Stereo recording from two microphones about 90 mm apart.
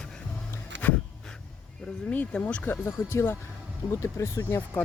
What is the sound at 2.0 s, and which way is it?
Speech, 15° left (ahead or behind).